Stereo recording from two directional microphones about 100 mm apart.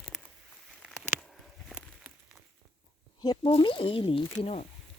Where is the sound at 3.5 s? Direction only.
60° left (ahead or behind).